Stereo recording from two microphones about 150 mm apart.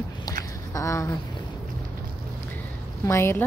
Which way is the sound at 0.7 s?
20° left (ahead or behind).